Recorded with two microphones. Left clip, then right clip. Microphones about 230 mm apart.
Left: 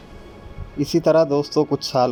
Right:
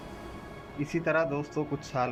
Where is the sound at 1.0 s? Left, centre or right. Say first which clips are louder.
Left 12 dB; left.